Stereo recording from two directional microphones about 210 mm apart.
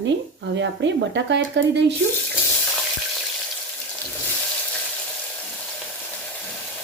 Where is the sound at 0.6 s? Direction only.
60° right (ahead or behind).